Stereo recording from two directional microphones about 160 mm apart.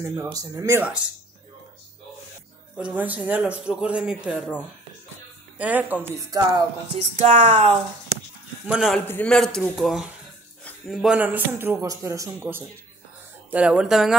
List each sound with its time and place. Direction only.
0.0 s speech: 20° right (ahead or behind)
2.8 s a man's voice: 10° right (ahead or behind)
5.6 s a man's voice: 10° right (ahead or behind)
6.3 s speech: 25° right (ahead or behind)
6.9 s speech: 45° right (ahead or behind)
8.6 s a man's voice: centre (ahead or behind)
9.0 s a man's voice: 10° left (ahead or behind)